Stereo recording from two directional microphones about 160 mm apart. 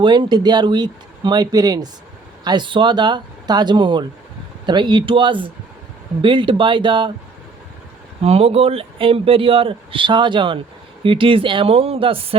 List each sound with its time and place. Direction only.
0.0 s speech: 30° right (ahead or behind)
8.2 s speech: 40° right (ahead or behind)